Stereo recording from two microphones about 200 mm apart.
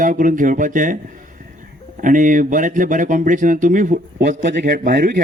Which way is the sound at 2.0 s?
40° right (ahead or behind).